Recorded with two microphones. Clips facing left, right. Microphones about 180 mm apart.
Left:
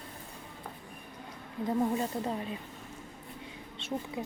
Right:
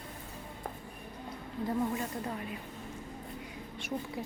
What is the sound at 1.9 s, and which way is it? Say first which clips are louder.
Speech: left 4 dB; 25° left (ahead or behind).